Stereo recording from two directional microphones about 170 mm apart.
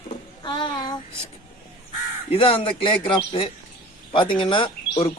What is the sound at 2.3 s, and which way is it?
Speech, 35° left (ahead or behind).